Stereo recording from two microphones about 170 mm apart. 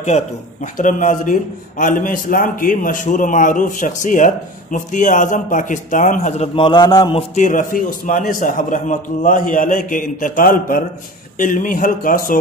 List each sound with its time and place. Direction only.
0.7 s a man's voice: 50° left (ahead or behind); by 7.2 s 25° left (ahead or behind)
7.2 s a man's voice: 45° left (ahead or behind)